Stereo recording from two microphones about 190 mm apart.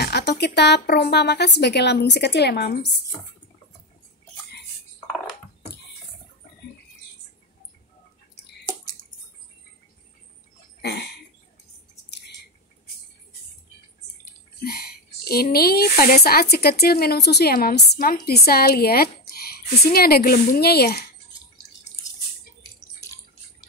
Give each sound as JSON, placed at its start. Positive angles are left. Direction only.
{"t": 0.0, "sound": "speech", "side_deg": 60}
{"t": 10.8, "sound": "a sound", "side_deg": 60}
{"t": 14.6, "sound": "speech", "side_deg": 55}